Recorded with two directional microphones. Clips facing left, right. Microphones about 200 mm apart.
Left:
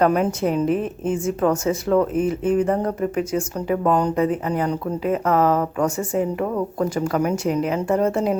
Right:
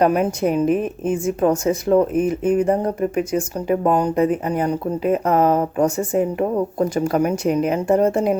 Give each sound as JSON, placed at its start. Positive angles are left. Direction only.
{"t": 0.0, "sound": "speech", "side_deg": -15}